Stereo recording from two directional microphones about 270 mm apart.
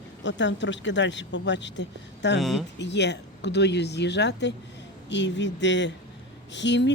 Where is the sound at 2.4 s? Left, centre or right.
Centre.